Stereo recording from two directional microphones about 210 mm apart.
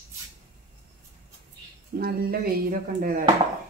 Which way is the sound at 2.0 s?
45° right (ahead or behind).